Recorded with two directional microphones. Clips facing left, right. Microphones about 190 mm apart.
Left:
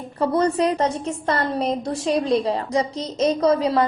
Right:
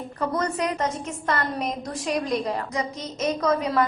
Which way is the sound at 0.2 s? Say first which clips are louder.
Left 7 dB; 30° left (ahead or behind).